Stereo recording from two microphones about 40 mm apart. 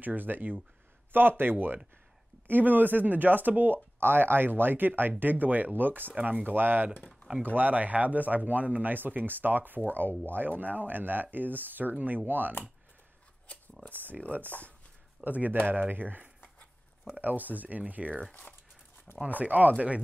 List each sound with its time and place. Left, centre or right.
0.0 s speech: right
10.6 s speech: right
13.9 s speech: right
15.2 s speech: right
19.2 s speech: right